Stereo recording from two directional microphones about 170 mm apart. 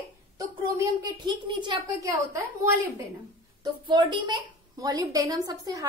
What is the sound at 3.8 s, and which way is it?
A woman's voice, 25° right (ahead or behind).